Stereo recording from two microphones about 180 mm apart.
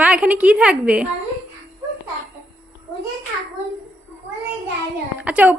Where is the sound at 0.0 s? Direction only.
5° right (ahead or behind).